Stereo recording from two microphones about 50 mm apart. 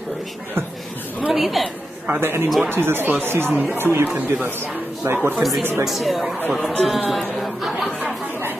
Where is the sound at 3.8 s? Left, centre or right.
Right.